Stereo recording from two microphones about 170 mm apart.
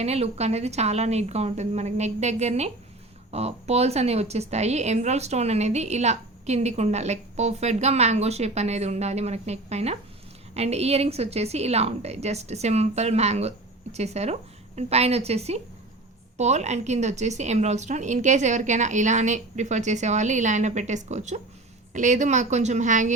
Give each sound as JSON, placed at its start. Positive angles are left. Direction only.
{"t": 0.0, "sound": "a woman's voice", "side_deg": -40}